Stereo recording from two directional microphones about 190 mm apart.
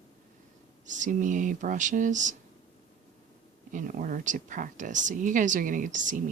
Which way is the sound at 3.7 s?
45° right (ahead or behind).